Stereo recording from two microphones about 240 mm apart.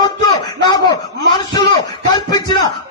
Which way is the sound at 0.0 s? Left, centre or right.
Centre.